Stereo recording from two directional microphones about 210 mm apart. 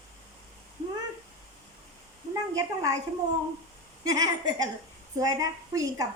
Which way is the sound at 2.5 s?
15° right (ahead or behind).